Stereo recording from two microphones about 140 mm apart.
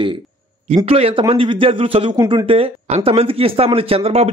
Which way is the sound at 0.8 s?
45° right (ahead or behind).